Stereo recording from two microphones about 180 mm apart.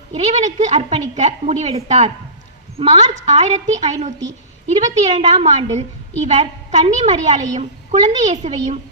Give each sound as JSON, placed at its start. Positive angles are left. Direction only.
{"t": 0.1, "sound": "a woman's voice", "side_deg": -40}